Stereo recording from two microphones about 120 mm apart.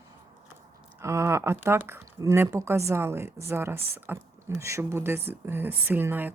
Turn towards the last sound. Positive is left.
turn(degrees=-15)  # may be behind; listen again after turning